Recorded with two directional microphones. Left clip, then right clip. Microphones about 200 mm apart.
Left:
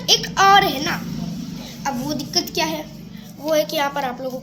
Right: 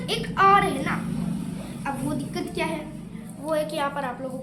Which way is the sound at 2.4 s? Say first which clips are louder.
Left 9 dB; 50° left (ahead or behind).